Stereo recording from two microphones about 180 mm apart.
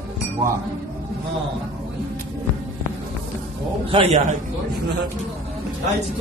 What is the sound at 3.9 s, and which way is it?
Speech, 35° right (ahead or behind).